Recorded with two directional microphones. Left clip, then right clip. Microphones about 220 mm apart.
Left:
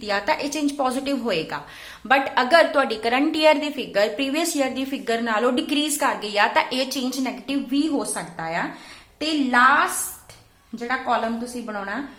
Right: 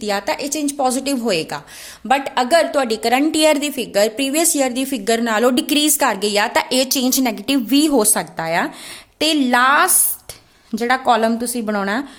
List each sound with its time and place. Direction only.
0.0 s a woman's voice: 40° right (ahead or behind)